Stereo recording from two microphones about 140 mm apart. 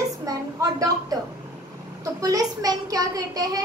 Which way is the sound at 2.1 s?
25° right (ahead or behind).